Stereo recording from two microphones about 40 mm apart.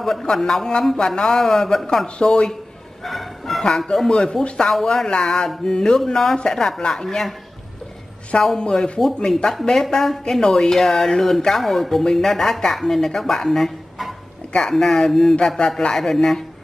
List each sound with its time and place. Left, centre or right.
0.0 s speech: centre
2.0 s speech: left
3.0 s music: centre
4.1 s speech: left
8.5 s speech: centre
9.8 s speech: centre